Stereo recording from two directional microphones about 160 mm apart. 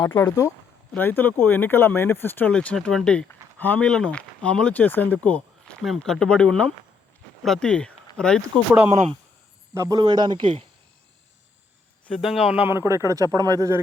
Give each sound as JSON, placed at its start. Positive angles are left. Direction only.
{"t": 0.1, "sound": "speech", "side_deg": 20}
{"t": 8.9, "sound": "speech", "side_deg": -45}
{"t": 9.7, "sound": "speech", "side_deg": -20}
{"t": 12.0, "sound": "speech", "side_deg": 0}